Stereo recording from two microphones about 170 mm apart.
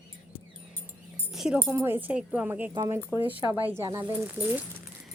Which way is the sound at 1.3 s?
5° right (ahead or behind).